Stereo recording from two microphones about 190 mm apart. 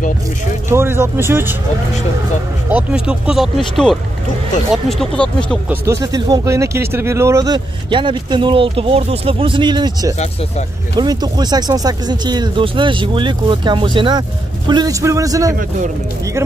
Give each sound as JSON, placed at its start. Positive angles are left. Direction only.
{"t": 0.7, "sound": "speech", "side_deg": -10}
{"t": 2.7, "sound": "speech", "side_deg": -5}
{"t": 5.7, "sound": "speech", "side_deg": -15}